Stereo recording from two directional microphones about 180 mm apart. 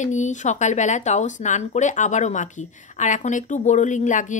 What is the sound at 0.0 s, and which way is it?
Speech, 45° left (ahead or behind).